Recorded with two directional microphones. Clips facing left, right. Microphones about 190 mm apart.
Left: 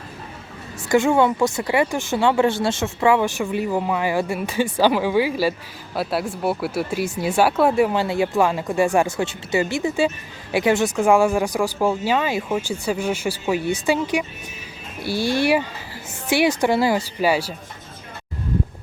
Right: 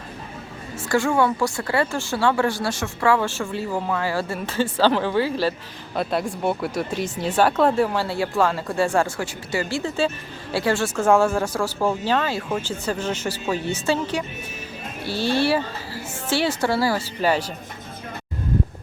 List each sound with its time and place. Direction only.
0.9 s speech: 20° left (ahead or behind)